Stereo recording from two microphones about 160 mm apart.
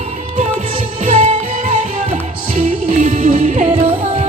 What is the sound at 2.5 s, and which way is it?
Music, 55° right (ahead or behind).